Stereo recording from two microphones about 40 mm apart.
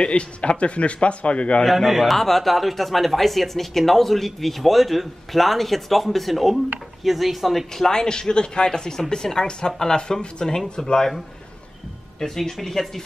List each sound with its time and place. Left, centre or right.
0.0 s a man's voice: left
1.6 s speech: centre
7.7 s speech: centre